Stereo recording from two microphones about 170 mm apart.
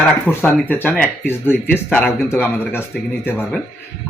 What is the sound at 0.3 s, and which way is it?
Speech, 10° left (ahead or behind).